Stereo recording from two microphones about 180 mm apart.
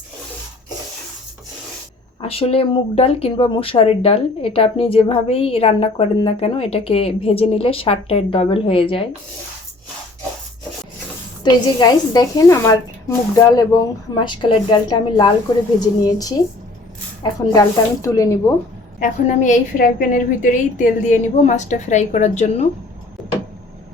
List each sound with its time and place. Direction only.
2.2 s speech: 30° left (ahead or behind)
11.4 s a woman's voice: 25° left (ahead or behind)
17.5 s speech: 20° left (ahead or behind)
18.9 s a woman's voice: 45° left (ahead or behind)